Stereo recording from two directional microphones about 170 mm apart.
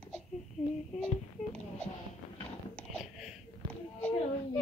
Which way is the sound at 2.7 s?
Centre (ahead or behind).